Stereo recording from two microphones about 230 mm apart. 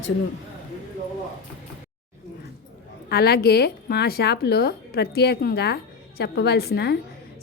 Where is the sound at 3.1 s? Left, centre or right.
Left.